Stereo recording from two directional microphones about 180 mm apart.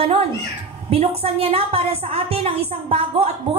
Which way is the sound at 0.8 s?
35° right (ahead or behind).